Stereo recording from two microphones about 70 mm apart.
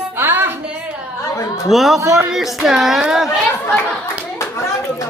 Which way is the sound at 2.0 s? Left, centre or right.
Right.